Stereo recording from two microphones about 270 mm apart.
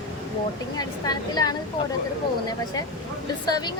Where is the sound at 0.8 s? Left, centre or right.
Centre.